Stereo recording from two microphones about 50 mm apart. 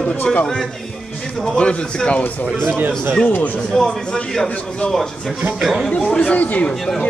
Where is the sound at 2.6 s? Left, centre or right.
Right.